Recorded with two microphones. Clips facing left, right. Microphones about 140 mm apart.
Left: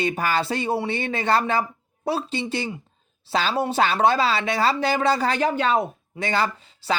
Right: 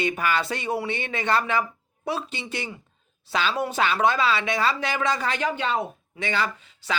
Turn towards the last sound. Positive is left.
turn(degrees=40)  # may be behind; listen again after turning